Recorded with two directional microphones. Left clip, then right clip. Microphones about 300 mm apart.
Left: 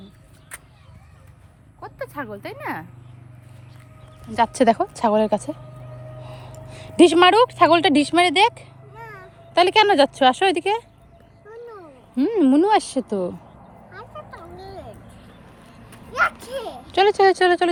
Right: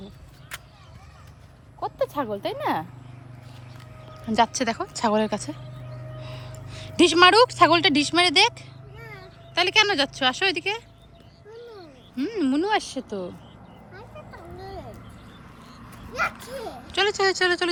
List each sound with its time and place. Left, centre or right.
1.8 s a woman's voice: centre
4.4 s a woman's voice: centre
12.4 s speech: centre
13.9 s a sound: centre
16.9 s speech: centre